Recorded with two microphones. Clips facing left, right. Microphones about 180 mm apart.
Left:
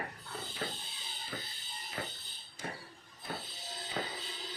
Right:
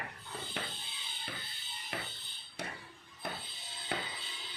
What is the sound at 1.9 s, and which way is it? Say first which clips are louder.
Music: left 1 dB; 70° right (ahead or behind).